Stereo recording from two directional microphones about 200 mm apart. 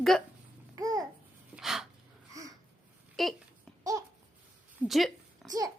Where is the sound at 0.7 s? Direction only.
15° right (ahead or behind).